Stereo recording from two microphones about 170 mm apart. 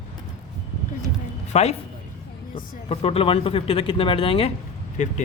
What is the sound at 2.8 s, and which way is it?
A man's voice, 35° left (ahead or behind).